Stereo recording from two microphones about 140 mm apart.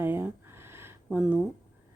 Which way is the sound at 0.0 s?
15° right (ahead or behind).